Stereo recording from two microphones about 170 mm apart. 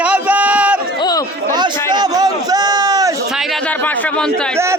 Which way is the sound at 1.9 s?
20° right (ahead or behind).